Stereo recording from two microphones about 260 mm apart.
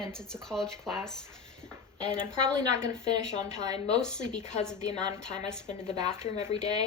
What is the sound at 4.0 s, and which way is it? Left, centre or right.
A woman's voice, centre.